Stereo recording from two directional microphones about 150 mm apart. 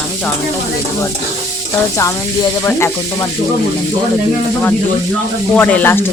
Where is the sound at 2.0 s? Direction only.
25° left (ahead or behind).